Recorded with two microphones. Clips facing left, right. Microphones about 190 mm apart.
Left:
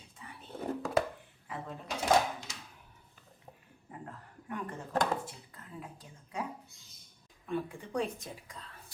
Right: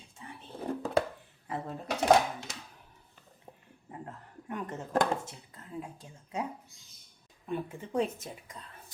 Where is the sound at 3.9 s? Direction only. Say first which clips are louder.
Right 2 dB; 25° right (ahead or behind).